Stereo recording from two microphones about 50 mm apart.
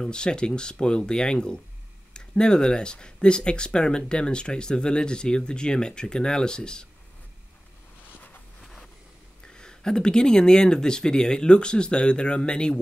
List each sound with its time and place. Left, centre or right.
0.0 s speech: centre
9.4 s speech: centre